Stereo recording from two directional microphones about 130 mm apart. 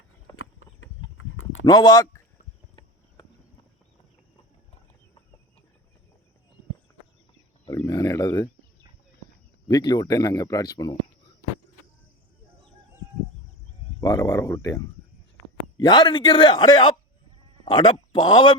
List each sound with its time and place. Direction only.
1.6 s speech: 30° left (ahead or behind)
3.2 s clip-clop: 30° left (ahead or behind)
7.7 s wild animals: 25° left (ahead or behind)
9.6 s speech: 30° left (ahead or behind)
14.0 s a man's voice: 25° left (ahead or behind)